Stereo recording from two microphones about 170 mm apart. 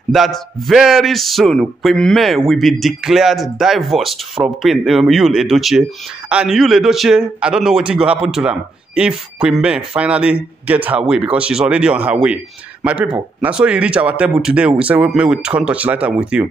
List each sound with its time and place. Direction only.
0.1 s speech: centre (ahead or behind)